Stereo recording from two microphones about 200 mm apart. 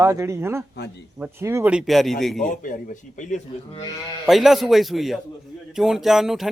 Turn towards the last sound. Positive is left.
turn(degrees=0)  # may be behind; listen again after turning